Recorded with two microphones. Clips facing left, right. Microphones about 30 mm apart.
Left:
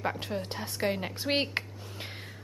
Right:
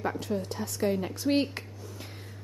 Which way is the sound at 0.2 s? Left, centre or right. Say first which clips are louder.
Right 2 dB; left.